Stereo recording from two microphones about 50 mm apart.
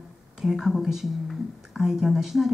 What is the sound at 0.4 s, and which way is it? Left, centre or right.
A woman's voice, centre.